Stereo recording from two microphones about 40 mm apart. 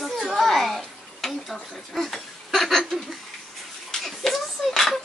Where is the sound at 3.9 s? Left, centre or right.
Centre.